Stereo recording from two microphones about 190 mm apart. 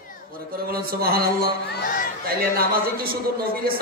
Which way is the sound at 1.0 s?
50° right (ahead or behind).